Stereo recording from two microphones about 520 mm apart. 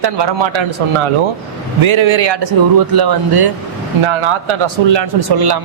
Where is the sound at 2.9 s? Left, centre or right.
Right.